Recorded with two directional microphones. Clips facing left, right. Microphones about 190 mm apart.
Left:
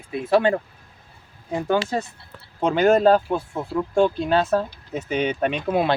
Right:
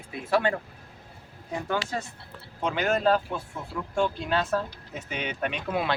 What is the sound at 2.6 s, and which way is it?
Speech, 40° left (ahead or behind).